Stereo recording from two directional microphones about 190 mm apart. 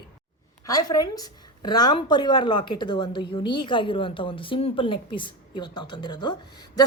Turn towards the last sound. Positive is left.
turn(degrees=20)  # may be behind; listen again after turning